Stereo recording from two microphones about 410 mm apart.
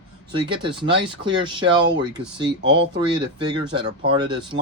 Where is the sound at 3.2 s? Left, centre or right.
Right.